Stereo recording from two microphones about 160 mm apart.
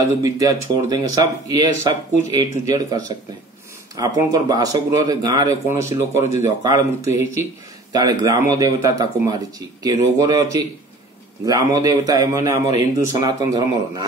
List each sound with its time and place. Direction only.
0.2 s speech: 20° right (ahead or behind)
11.4 s speech: 20° right (ahead or behind)